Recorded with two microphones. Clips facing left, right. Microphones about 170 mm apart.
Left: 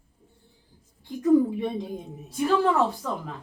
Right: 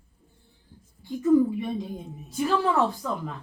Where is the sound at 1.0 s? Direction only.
Centre (ahead or behind).